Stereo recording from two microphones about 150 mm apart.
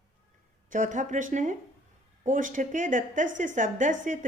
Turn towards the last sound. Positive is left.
turn(degrees=-60)  # may be behind; listen again after turning